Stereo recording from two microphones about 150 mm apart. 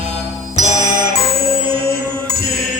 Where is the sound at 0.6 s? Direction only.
55° right (ahead or behind).